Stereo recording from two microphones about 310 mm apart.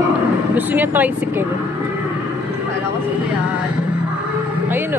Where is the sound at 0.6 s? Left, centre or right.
Centre.